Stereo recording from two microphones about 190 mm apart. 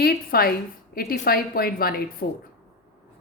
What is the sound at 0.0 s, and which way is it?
A woman's voice, 55° left (ahead or behind).